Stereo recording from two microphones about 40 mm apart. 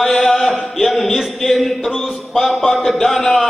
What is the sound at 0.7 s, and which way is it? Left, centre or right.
Speech, centre.